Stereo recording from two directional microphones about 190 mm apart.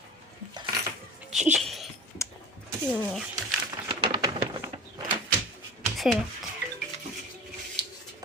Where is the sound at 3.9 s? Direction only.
25° right (ahead or behind).